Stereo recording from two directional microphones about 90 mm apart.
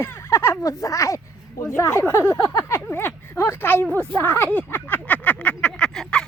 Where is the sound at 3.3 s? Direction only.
25° left (ahead or behind).